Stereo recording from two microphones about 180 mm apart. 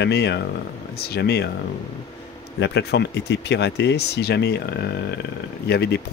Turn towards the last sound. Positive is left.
turn(degrees=65)  # may be behind; listen again after turning